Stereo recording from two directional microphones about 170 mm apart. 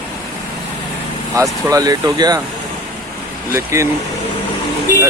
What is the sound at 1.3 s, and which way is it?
Speech, 20° right (ahead or behind).